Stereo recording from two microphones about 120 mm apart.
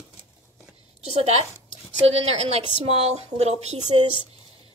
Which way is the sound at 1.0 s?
65° right (ahead or behind).